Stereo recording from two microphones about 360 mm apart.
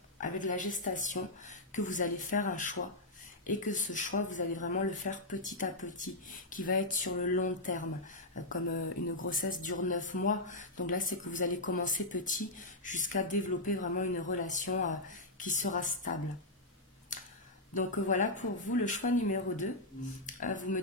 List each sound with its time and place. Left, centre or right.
0.2 s speech: left
9.1 s speech: left
17.1 s a sound: left
17.7 s speech: left